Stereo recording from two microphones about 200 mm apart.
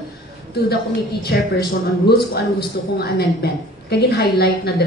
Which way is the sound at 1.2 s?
55° left (ahead or behind).